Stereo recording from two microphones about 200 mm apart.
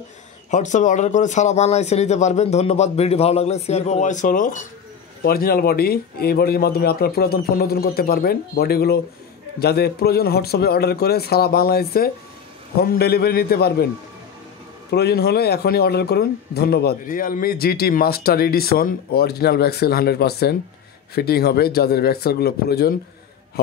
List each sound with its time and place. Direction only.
0.5 s speech: 35° left (ahead or behind); by 13.8 s 55° left (ahead or behind)
14.9 s speech: 55° left (ahead or behind)